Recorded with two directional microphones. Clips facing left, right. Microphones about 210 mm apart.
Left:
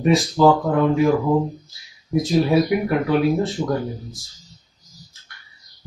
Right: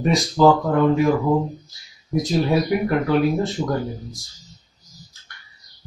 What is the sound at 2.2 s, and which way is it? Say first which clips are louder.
Speech: left 2 dB; centre (ahead or behind).